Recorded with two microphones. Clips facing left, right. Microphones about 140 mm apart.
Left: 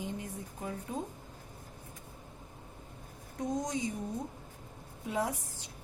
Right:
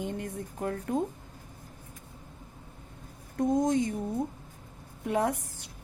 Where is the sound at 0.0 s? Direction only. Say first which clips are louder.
Right 5 dB; 60° right (ahead or behind).